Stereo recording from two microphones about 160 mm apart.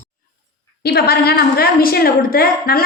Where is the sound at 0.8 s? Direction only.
85° left.